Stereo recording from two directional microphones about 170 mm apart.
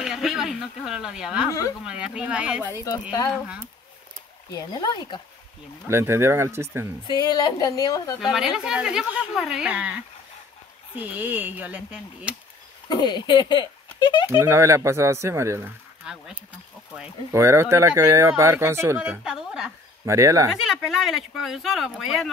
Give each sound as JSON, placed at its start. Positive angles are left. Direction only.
{"t": 0.0, "sound": "speech", "side_deg": 0}
{"t": 2.8, "sound": "a woman's voice", "side_deg": 20}
{"t": 4.5, "sound": "a woman's voice", "side_deg": 25}
{"t": 5.9, "sound": "speech", "side_deg": -15}
{"t": 7.1, "sound": "a woman's voice", "side_deg": 25}
{"t": 8.2, "sound": "speech", "side_deg": -5}
{"t": 12.8, "sound": "speech", "side_deg": 25}
{"t": 14.4, "sound": "speech", "side_deg": -15}
{"t": 16.0, "sound": "speech", "side_deg": -5}
{"t": 17.3, "sound": "speech", "side_deg": -15}
{"t": 20.1, "sound": "speech", "side_deg": -20}
{"t": 20.4, "sound": "speech", "side_deg": 0}